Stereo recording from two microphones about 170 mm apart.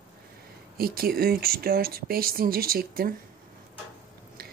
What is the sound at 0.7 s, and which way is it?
Speech, 60° right (ahead or behind).